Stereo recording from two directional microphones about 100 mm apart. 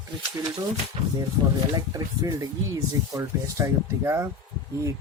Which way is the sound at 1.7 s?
40° right (ahead or behind).